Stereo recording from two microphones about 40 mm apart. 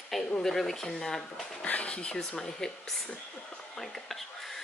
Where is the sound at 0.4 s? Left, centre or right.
Centre.